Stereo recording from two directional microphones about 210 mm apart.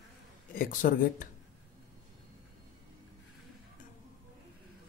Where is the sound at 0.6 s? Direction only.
40° left (ahead or behind).